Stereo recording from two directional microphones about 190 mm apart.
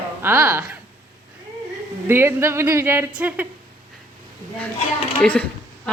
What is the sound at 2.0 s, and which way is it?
A woman's voice, 10° right (ahead or behind).